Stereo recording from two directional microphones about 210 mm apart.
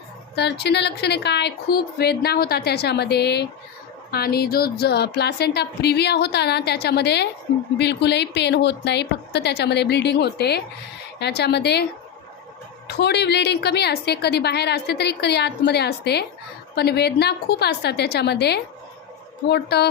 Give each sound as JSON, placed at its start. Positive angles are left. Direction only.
{"t": 0.3, "sound": "a woman's voice", "side_deg": 50}
{"t": 12.9, "sound": "a woman's voice", "side_deg": 50}